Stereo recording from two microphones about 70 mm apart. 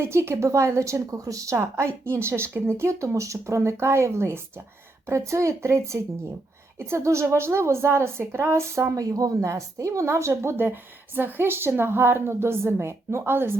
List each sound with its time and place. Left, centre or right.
0.0 s speech: right
9.0 s speech: right